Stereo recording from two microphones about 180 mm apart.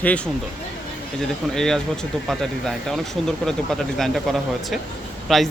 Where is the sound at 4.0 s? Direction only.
Centre (ahead or behind).